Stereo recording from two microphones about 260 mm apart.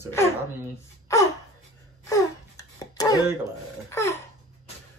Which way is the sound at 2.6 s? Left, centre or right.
Centre.